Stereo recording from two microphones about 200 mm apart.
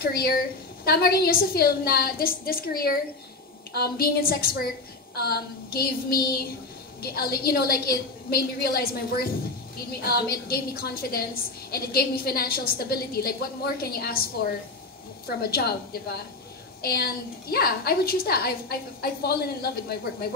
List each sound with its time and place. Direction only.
0.0 s a woman's voice: 50° left (ahead or behind)
15.2 s a woman's voice: 50° left (ahead or behind)